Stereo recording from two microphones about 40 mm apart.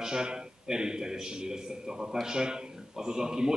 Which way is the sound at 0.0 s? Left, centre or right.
Centre.